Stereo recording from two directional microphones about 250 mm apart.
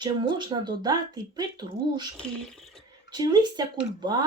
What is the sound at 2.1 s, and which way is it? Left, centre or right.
Speech, centre.